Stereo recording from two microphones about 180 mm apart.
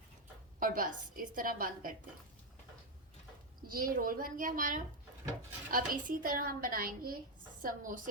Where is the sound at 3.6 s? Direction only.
50° right (ahead or behind).